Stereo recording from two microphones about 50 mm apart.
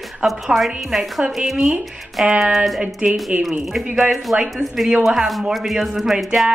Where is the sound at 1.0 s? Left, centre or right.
Centre.